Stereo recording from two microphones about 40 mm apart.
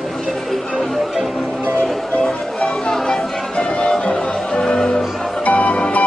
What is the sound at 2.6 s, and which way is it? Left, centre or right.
Music, centre.